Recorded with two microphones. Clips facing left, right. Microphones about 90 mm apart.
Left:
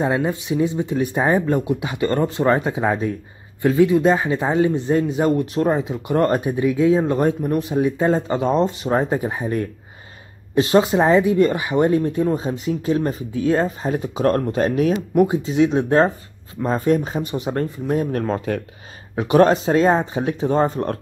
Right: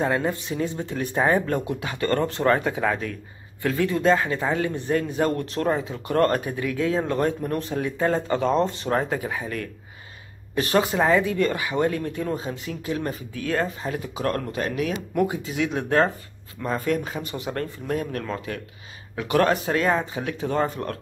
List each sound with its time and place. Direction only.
0.0 s speech: 15° left (ahead or behind); by 15.0 s 35° left (ahead or behind)
15.1 s speech: 25° left (ahead or behind)
19.1 s speech: 25° left (ahead or behind)